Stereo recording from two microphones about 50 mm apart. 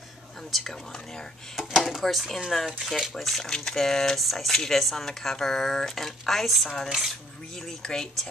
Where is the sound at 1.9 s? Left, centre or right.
Centre.